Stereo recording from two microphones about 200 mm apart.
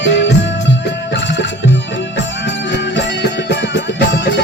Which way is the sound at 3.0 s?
60° left (ahead or behind).